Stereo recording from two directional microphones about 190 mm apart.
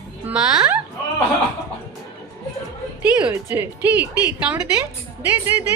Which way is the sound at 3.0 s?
5° right (ahead or behind).